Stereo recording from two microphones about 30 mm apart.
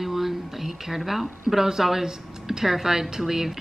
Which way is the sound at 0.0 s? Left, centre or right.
Centre.